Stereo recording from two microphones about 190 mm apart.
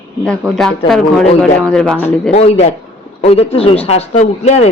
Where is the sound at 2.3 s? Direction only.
35° left (ahead or behind).